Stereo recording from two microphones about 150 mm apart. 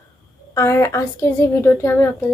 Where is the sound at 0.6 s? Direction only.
20° left (ahead or behind).